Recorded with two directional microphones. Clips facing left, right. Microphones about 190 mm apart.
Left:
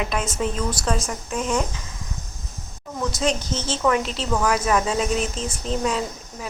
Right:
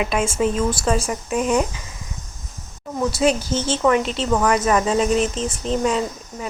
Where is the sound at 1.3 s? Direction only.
15° right (ahead or behind).